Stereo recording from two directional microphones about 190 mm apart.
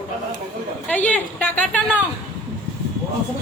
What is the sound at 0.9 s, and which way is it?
A woman's voice, 10° left (ahead or behind).